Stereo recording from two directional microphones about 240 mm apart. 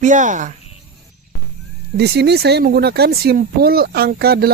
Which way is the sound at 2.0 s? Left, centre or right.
Right.